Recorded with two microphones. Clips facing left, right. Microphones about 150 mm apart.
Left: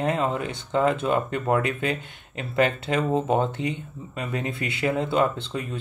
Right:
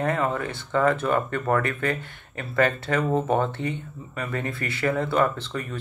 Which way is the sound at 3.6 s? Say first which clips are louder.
Left 1 dB; 90° left.